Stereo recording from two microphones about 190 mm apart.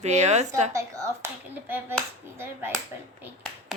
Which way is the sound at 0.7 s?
15° right (ahead or behind).